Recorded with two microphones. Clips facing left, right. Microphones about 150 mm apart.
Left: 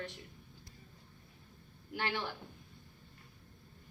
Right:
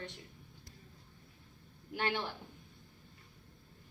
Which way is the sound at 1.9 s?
20° right (ahead or behind).